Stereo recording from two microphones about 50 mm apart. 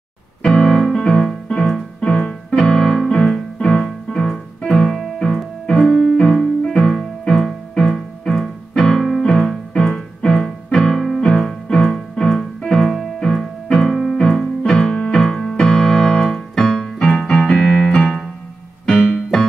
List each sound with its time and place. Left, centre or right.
0.4 s piano: centre
0.7 s music: centre
0.9 s music: centre
2.0 s keyboard: centre
4.6 s music: centre
10.7 s keyboard: centre
14.1 s music: centre
14.7 s keyboard: centre
18.9 s music: centre